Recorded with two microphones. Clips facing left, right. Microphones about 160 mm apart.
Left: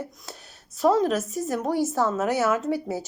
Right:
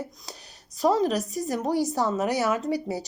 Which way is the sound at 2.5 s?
Centre (ahead or behind).